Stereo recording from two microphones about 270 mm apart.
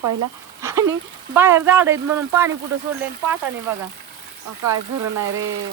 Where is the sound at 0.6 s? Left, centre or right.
Centre.